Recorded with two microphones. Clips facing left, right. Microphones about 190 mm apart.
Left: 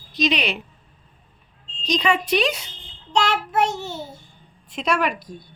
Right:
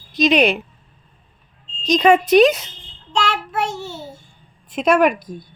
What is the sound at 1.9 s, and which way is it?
Speech, 45° right (ahead or behind).